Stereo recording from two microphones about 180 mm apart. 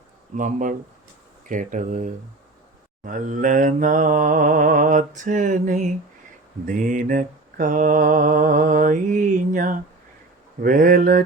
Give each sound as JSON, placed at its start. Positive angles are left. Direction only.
{"t": 0.3, "sound": "mantra", "side_deg": -45}